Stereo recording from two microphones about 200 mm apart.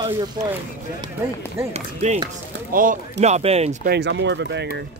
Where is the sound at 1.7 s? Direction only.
30° right (ahead or behind).